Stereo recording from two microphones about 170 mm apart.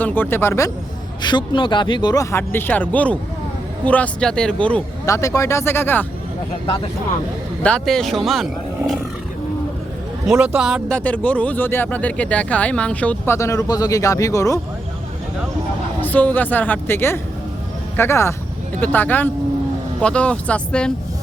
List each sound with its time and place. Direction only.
0.0 s speech: 10° left (ahead or behind)
1.2 s speech: 25° left (ahead or behind); by 4.8 s 5° left (ahead or behind)
5.0 s speech: 20° left (ahead or behind)
7.6 s speech: 5° left (ahead or behind)
10.3 s speech: 5° right (ahead or behind); by 14.6 s 20° left (ahead or behind)
16.0 s speech: 10° left (ahead or behind)